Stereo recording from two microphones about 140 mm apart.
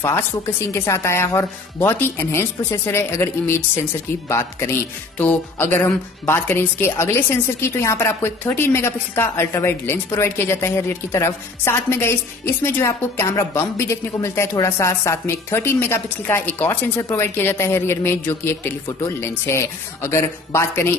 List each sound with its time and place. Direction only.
0.7 s a woman's voice: 20° left (ahead or behind)